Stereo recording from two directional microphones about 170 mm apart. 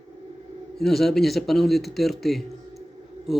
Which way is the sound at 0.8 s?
Centre (ahead or behind).